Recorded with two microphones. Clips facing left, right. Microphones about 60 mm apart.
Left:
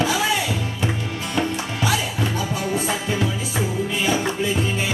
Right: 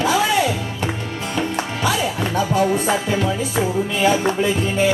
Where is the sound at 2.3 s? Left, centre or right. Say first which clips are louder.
Right 6 dB; right.